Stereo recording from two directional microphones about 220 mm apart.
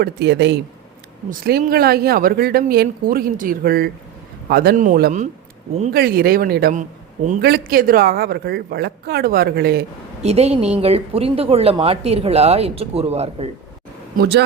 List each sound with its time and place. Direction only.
0.0 s a woman's voice: 50° right (ahead or behind)
10.2 s a woman's voice: 30° right (ahead or behind)
14.2 s a woman's voice: 50° right (ahead or behind)